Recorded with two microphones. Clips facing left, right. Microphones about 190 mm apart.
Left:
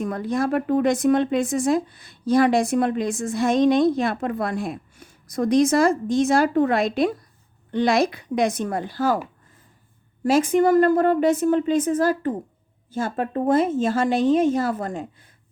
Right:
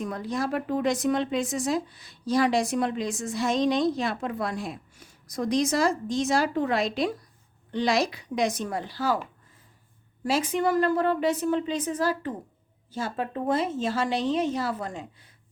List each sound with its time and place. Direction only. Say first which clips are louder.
0.0 s speech: left 6 dB; 55° left (ahead or behind)
10.2 s speech: left 7 dB; 50° left (ahead or behind)